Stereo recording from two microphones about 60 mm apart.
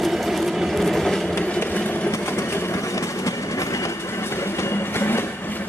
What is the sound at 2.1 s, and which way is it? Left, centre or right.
Train, left.